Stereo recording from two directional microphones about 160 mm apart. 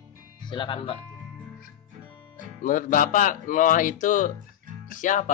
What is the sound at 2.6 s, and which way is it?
Speech, 55° left (ahead or behind).